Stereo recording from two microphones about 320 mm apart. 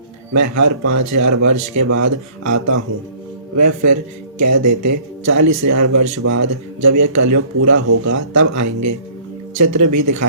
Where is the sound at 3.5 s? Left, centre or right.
Right.